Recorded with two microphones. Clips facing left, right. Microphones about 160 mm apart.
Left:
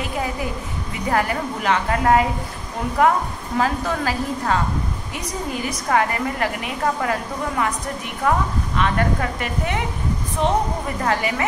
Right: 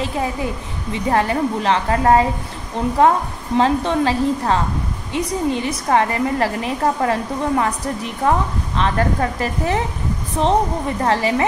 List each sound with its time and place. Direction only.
0.0 s a woman's voice: 25° right (ahead or behind)
11.0 s a woman's voice: 30° right (ahead or behind)